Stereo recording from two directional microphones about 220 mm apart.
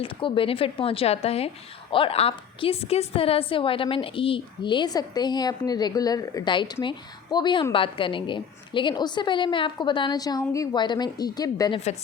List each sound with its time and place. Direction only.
0.0 s a woman's voice: 25° left (ahead or behind)